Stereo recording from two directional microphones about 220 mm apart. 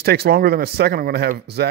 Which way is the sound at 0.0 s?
45° right (ahead or behind).